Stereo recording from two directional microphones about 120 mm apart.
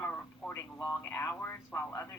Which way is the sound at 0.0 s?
15° left (ahead or behind).